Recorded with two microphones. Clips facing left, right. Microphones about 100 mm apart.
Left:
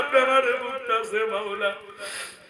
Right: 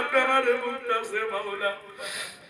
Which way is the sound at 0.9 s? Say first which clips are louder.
Left 5 dB; 60° left (ahead or behind).